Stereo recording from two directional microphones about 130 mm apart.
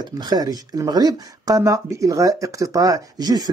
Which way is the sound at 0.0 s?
30° right (ahead or behind).